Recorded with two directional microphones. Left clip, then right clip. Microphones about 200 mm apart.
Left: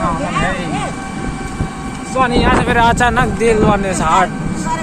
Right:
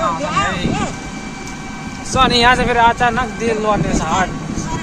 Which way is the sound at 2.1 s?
60° right (ahead or behind).